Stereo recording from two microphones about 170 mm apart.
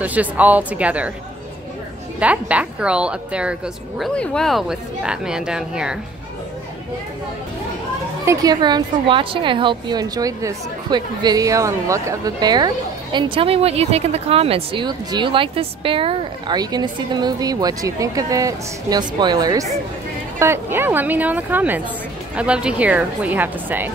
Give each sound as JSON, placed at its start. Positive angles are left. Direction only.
{"t": 0.0, "sound": "a woman's voice", "side_deg": -10}
{"t": 2.1, "sound": "a woman's voice", "side_deg": -5}
{"t": 4.1, "sound": "speech", "side_deg": 5}
{"t": 8.3, "sound": "a woman's voice", "side_deg": -20}